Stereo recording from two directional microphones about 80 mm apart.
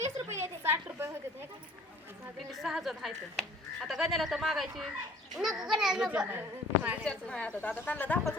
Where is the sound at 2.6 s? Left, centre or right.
Centre.